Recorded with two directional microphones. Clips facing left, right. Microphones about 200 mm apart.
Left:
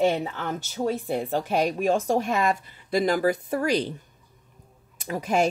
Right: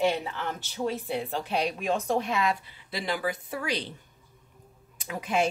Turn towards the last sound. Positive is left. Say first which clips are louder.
# left 4 dB
turn(degrees=40)  # may be behind; listen again after turning